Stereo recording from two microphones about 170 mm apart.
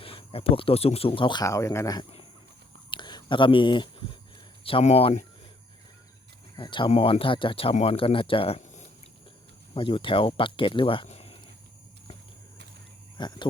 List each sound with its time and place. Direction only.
0.0 s speech: 35° left (ahead or behind)
2.9 s whispering: 25° left (ahead or behind)
4.6 s speech: 35° left (ahead or behind)
6.6 s speech: 30° left (ahead or behind)
13.1 s speech: 25° left (ahead or behind)